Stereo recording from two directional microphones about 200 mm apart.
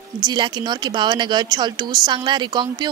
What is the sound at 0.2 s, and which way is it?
Speech, 20° right (ahead or behind).